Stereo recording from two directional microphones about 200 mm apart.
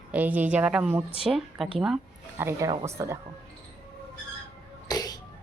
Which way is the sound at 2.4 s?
15° right (ahead or behind).